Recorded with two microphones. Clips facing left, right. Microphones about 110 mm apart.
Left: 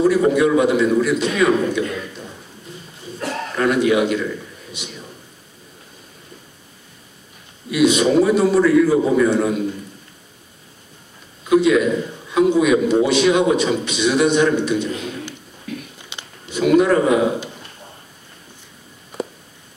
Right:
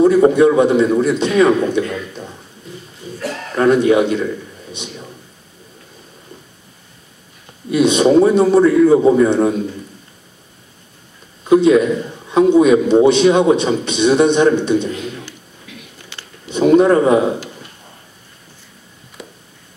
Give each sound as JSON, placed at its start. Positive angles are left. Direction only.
{"t": 0.0, "sound": "a man's voice", "side_deg": -30}
{"t": 3.5, "sound": "a man's voice", "side_deg": -30}
{"t": 7.7, "sound": "a man's voice", "side_deg": -30}
{"t": 11.4, "sound": "a man's voice", "side_deg": -30}
{"t": 15.7, "sound": "a sound", "side_deg": 45}
{"t": 16.1, "sound": "a sound", "side_deg": 15}
{"t": 16.5, "sound": "a man's voice", "side_deg": -30}